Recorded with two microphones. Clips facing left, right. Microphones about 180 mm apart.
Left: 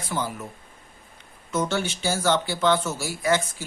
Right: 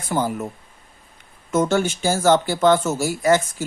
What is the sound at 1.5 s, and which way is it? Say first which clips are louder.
Speech: right 6 dB; 45° right (ahead or behind).